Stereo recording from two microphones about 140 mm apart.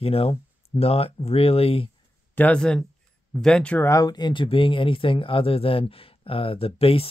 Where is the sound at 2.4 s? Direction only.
10° left (ahead or behind).